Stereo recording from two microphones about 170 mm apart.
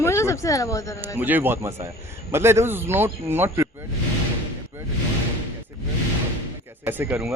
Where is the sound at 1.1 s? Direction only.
10° right (ahead or behind).